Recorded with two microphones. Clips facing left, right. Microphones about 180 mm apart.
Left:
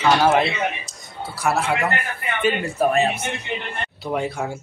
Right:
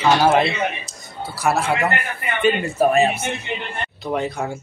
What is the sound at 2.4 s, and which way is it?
Speech, centre (ahead or behind).